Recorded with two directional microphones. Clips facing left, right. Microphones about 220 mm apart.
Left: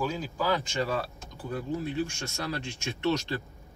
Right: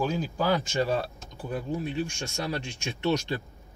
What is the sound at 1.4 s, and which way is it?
Speech, 15° right (ahead or behind).